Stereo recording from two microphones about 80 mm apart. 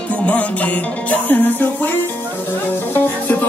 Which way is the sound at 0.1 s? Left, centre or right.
Centre.